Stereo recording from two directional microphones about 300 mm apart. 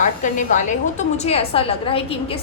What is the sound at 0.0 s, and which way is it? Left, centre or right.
A woman's voice, left.